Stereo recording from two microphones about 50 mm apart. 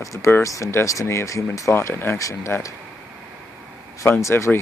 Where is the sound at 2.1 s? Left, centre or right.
Left.